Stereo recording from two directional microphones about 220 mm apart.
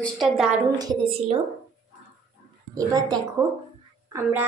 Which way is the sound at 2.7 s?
15° right (ahead or behind).